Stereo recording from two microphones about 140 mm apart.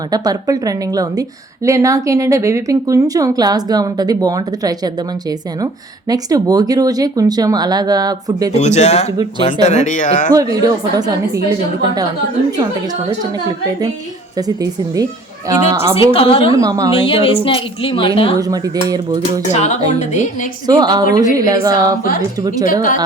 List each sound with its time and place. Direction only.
0.1 s speech: 25° right (ahead or behind)
6.1 s speech: 25° right (ahead or behind)
8.5 s speech: 55° left (ahead or behind)
10.3 s speech: 25° right (ahead or behind)
14.3 s speech: 25° right (ahead or behind)
16.1 s a woman's voice: 40° left (ahead or behind)
16.5 s speech: 25° right (ahead or behind)
16.9 s a woman's voice: 40° left (ahead or behind)
18.3 s speech: 25° right (ahead or behind)
19.5 s speech: 55° left (ahead or behind)
20.7 s speech: 30° right (ahead or behind)